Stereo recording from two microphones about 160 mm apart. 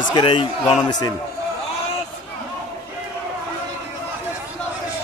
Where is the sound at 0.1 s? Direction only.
35° left (ahead or behind).